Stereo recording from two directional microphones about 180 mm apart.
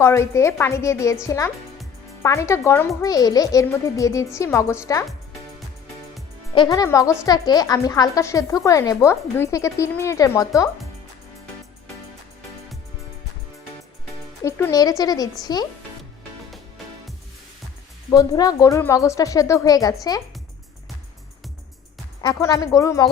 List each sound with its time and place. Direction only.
0.0 s speech: 15° left (ahead or behind)
6.5 s speech: 25° left (ahead or behind)
14.4 s speech: 20° left (ahead or behind)
18.1 s speech: 20° left (ahead or behind)
22.2 s speech: 20° left (ahead or behind)